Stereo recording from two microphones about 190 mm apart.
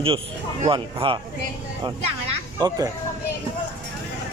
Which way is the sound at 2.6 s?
20° right (ahead or behind).